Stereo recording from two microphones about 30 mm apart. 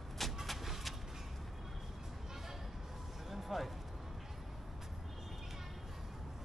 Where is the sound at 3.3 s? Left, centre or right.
Centre.